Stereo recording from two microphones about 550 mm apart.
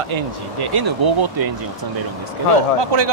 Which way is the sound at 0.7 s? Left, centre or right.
Right.